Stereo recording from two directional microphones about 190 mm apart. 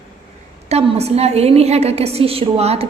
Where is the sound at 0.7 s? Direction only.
35° right (ahead or behind).